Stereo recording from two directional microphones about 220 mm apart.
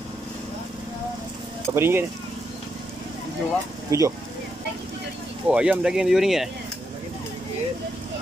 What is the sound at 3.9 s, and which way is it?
Speech, 15° right (ahead or behind).